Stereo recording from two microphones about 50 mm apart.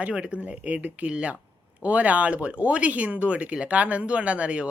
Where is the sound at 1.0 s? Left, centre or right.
Right.